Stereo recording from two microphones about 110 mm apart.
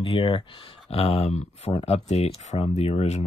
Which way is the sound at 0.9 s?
70° left (ahead or behind).